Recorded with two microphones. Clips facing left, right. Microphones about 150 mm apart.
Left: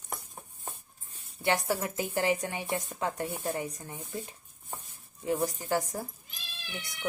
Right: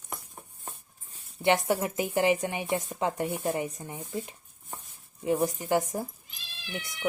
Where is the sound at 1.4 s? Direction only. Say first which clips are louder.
Right 4 dB; 20° right (ahead or behind).